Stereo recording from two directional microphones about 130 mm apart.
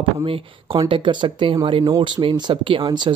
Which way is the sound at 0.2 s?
45° right (ahead or behind).